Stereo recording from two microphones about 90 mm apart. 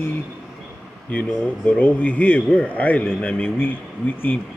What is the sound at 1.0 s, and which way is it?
A man's voice, 15° left (ahead or behind).